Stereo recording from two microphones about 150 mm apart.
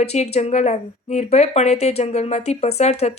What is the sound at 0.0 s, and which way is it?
Speech, 45° left (ahead or behind).